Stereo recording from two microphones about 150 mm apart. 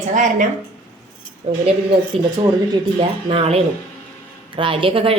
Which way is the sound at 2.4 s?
30° right (ahead or behind).